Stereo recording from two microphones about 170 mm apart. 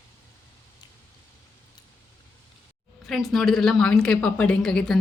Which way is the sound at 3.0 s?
Centre (ahead or behind).